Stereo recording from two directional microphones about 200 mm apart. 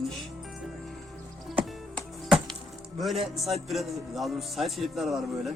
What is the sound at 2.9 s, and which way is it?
Speech, centre (ahead or behind).